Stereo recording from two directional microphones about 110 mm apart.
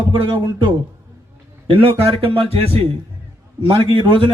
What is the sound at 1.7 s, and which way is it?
A man's voice, 60° right (ahead or behind).